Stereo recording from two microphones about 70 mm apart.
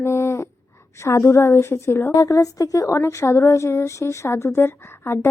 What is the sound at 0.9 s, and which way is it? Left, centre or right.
Speech, left.